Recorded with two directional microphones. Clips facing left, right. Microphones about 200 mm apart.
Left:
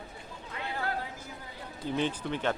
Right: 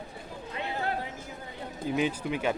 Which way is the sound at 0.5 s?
20° right (ahead or behind).